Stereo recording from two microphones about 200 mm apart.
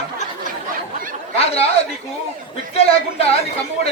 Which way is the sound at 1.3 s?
30° left (ahead or behind).